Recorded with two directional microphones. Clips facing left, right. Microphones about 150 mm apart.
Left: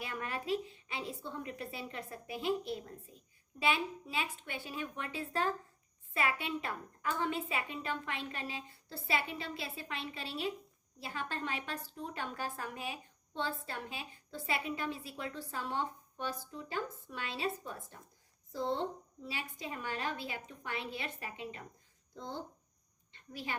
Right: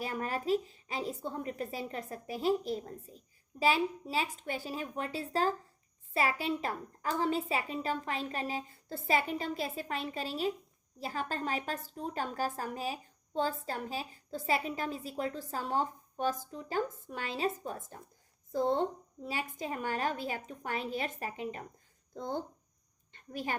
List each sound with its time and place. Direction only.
0.0 s a woman's voice: 40° right (ahead or behind)